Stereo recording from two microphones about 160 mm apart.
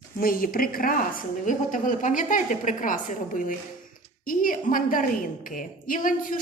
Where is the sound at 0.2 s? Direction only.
65° left (ahead or behind).